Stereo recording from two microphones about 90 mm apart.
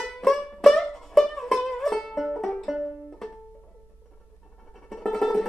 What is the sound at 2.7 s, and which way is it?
Music, 10° right (ahead or behind).